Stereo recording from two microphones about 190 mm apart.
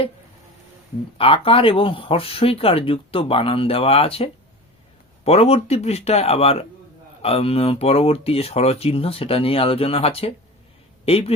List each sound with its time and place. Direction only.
1.2 s a man's voice: 30° left (ahead or behind)